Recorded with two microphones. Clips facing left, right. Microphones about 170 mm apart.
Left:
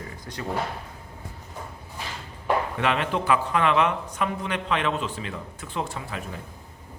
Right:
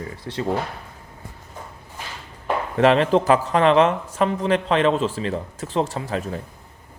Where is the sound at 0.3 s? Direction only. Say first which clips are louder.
Right 10 dB; 25° right (ahead or behind).